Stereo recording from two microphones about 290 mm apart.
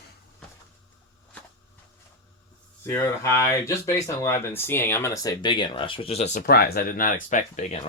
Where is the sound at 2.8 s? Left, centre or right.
Centre.